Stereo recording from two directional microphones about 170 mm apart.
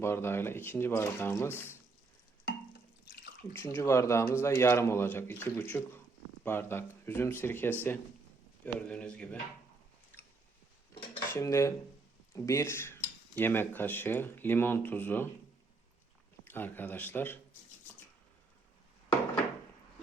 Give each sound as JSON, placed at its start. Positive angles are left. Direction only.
{"t": 0.0, "sound": "speech", "side_deg": 15}
{"t": 3.6, "sound": "speech", "side_deg": 15}
{"t": 11.3, "sound": "speech", "side_deg": 15}
{"t": 16.4, "sound": "speech", "side_deg": 10}